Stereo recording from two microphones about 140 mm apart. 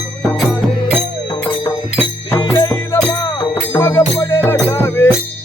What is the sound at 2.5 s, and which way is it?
Music, 20° left (ahead or behind).